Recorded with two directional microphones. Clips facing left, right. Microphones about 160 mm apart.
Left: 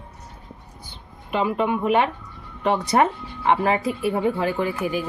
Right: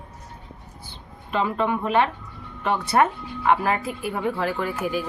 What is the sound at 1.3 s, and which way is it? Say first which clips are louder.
A woman's voice: left 1 dB; 15° left (ahead or behind).